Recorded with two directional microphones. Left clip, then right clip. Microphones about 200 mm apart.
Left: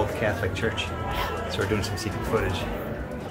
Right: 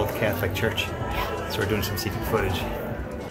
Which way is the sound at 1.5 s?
5° right (ahead or behind).